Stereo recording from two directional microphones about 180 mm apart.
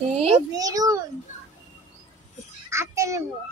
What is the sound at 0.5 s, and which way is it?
Speech, 20° right (ahead or behind).